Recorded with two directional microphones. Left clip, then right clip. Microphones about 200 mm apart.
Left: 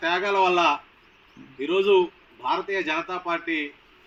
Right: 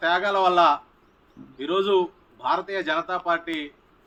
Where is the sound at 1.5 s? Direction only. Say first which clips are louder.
Left 2 dB; 15° right (ahead or behind).